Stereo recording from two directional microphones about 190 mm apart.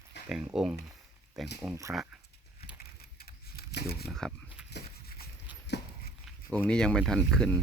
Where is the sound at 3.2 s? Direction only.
55° left (ahead or behind).